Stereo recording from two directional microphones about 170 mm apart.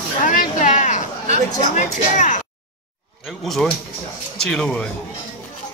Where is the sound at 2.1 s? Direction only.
50° left (ahead or behind).